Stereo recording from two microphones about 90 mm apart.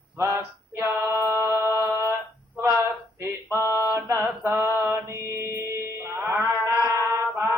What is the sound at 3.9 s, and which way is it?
Mantra, 35° right (ahead or behind).